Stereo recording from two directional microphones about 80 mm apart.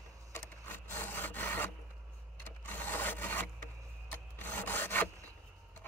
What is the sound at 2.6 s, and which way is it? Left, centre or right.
Filing, left.